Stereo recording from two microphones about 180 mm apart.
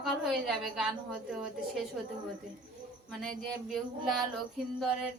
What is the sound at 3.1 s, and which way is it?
A woman's voice, centre (ahead or behind).